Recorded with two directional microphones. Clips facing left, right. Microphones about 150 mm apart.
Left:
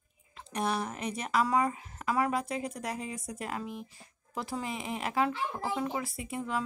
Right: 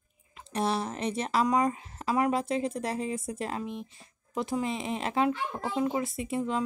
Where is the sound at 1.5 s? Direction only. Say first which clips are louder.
Right 3 dB; 15° right (ahead or behind).